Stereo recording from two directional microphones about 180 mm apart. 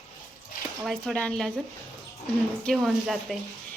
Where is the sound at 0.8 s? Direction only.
5° left (ahead or behind).